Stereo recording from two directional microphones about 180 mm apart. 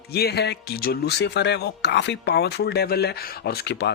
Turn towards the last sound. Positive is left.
turn(degrees=70)  # may be behind; listen again after turning